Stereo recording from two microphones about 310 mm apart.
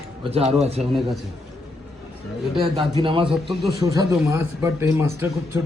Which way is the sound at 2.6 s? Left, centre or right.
Centre.